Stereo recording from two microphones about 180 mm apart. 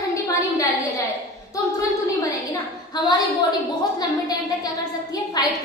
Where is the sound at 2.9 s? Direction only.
25° left (ahead or behind).